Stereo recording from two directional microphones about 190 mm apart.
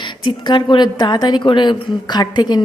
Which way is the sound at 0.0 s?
25° left (ahead or behind).